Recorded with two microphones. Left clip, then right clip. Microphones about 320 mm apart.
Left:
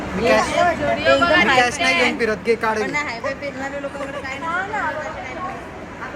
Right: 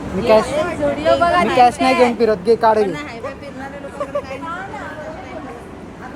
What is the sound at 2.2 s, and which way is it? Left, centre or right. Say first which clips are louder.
Speech: right 5 dB; centre.